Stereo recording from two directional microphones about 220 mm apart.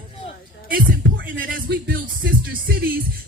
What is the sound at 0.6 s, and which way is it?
Music, 40° right (ahead or behind).